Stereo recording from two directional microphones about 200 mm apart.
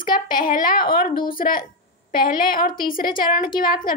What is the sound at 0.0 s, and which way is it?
Speech, 45° left (ahead or behind).